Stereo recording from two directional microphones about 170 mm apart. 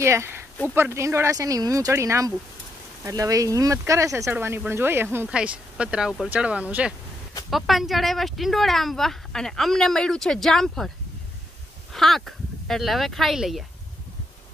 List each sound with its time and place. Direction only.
0.0 s speech: 15° right (ahead or behind); by 10.9 s centre (ahead or behind)
11.9 s speech: centre (ahead or behind)